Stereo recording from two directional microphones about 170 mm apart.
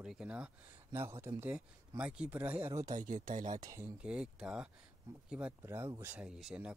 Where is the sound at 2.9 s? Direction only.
50° right (ahead or behind).